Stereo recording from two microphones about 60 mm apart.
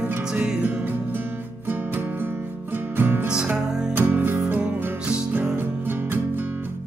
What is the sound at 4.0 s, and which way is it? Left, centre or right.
Music, right.